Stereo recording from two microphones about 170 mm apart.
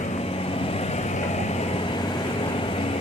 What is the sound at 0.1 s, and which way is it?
Vehicle, 35° left (ahead or behind).